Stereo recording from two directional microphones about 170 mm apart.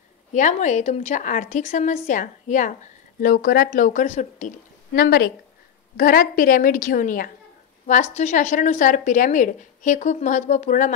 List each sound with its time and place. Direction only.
0.3 s a woman's voice: 45° left (ahead or behind)
4.9 s a woman's voice: 70° left (ahead or behind)
5.9 s a woman's voice: 55° left (ahead or behind)